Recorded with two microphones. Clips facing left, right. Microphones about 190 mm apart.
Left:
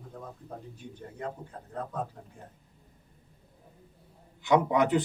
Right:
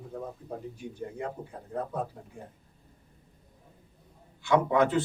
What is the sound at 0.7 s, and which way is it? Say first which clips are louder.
Speech: right 5 dB; 10° right (ahead or behind).